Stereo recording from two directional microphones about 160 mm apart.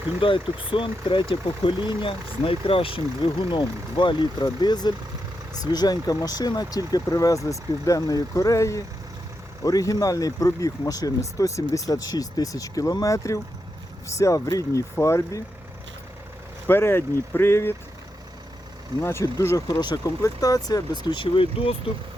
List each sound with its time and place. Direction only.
0.2 s speech: 30° left (ahead or behind); by 15.4 s 15° left (ahead or behind)
16.6 s speech: 15° left (ahead or behind)
19.0 s speech: 15° left (ahead or behind); by 21.8 s 35° left (ahead or behind)